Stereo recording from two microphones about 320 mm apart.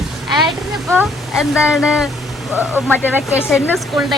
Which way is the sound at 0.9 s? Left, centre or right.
Centre.